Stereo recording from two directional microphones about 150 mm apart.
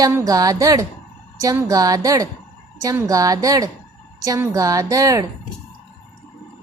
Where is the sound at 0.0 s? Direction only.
20° right (ahead or behind).